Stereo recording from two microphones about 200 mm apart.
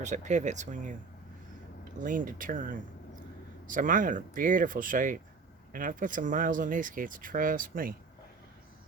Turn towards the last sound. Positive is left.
turn(degrees=-45)  # may be behind; listen again after turning